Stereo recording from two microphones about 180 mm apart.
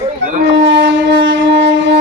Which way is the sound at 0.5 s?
75° right (ahead or behind).